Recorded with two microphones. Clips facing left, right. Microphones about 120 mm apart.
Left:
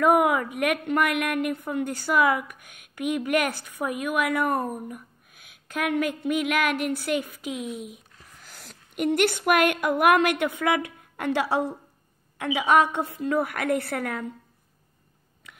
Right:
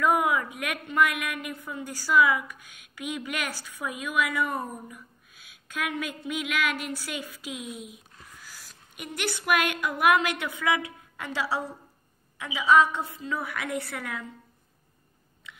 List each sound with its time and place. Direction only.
0.0 s a woman's voice: 60° left (ahead or behind)